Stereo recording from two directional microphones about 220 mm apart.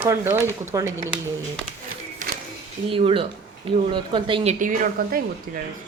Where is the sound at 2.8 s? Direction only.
25° right (ahead or behind).